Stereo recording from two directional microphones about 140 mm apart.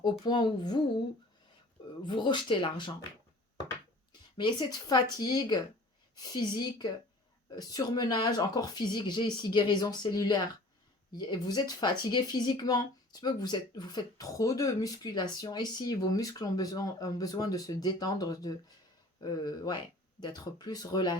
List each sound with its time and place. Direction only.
0.0 s speech: 30° left (ahead or behind)
2.0 s speech: 30° left (ahead or behind)
4.1 s speech: 30° left (ahead or behind)